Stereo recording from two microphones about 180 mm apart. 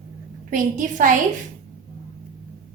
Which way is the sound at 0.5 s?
45° right (ahead or behind).